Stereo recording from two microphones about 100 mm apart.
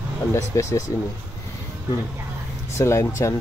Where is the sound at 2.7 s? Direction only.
25° left (ahead or behind).